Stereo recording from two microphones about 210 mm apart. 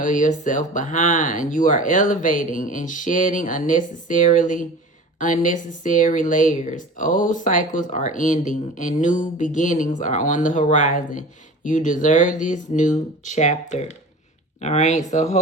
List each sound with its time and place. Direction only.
0.0 s speech: 40° left (ahead or behind)